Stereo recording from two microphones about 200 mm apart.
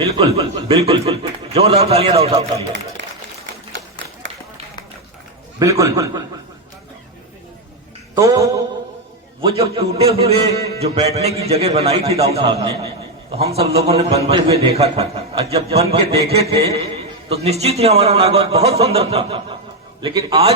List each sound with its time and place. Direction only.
0.0 s a man's voice: 30° right (ahead or behind)
3.0 s a sound: 65° right (ahead or behind)
5.5 s a man's voice: 15° right (ahead or behind)
8.1 s a man's voice: 15° right (ahead or behind)
9.4 s a man's voice: 30° right (ahead or behind)